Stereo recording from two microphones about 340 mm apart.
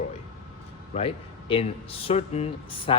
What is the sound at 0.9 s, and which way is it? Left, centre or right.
Speech, centre.